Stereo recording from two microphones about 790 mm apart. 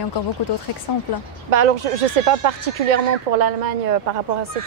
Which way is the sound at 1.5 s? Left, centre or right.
Right.